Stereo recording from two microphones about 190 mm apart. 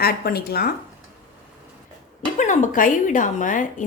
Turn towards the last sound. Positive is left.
turn(degrees=45)  # may be behind; listen again after turning